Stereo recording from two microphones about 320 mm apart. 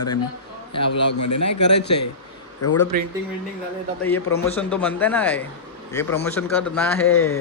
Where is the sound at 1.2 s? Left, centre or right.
Left.